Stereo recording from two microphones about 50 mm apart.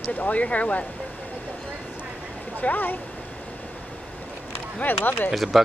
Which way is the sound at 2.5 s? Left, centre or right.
Left.